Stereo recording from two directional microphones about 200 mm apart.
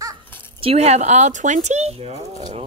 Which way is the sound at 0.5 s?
30° right (ahead or behind).